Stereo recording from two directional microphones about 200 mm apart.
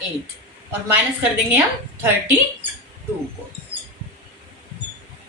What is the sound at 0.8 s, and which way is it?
Speech, 10° right (ahead or behind).